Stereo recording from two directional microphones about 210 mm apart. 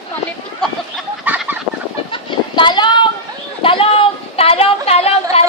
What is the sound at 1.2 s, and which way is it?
Fowl, 10° right (ahead or behind).